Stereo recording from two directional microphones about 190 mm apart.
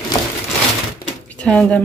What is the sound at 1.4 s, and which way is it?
Speech, 5° left (ahead or behind).